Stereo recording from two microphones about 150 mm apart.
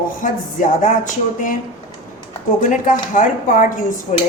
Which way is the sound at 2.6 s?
65° left (ahead or behind).